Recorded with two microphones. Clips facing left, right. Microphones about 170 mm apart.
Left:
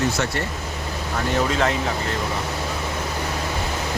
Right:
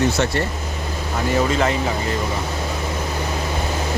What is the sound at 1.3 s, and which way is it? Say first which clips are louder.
Speech: right 2 dB; centre (ahead or behind).